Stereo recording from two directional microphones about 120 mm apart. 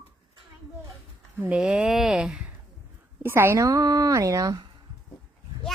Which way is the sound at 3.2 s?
20° right (ahead or behind).